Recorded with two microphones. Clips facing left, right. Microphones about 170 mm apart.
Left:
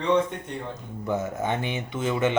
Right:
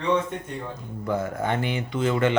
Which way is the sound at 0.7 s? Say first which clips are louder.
Right 1 dB; 20° left (ahead or behind).